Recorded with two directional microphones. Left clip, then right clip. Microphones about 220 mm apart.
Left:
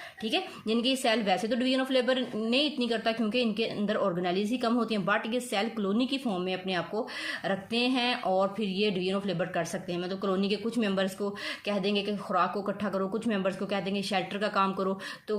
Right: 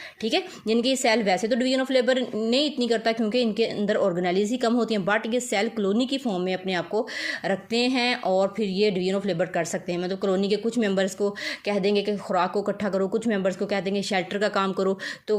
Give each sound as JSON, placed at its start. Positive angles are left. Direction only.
{"t": 0.3, "sound": "speech", "side_deg": -35}